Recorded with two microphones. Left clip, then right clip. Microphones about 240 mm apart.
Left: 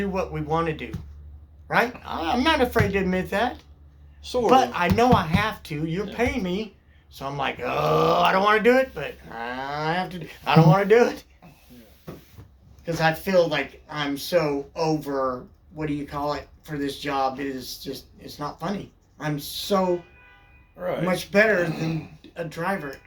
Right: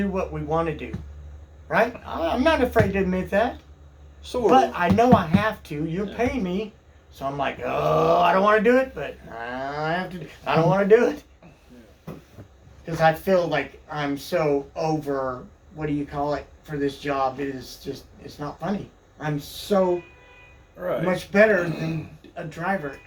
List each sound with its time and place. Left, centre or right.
0.1 s speech: left
4.2 s a woman's voice: centre
4.4 s speech: left
12.8 s speech: left
16.0 s speech: left
20.8 s speech: left